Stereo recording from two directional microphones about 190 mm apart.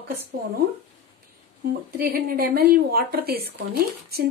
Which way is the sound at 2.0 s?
50° right (ahead or behind).